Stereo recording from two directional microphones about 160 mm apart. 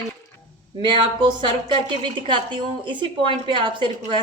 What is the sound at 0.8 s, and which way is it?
A woman's voice, 30° right (ahead or behind).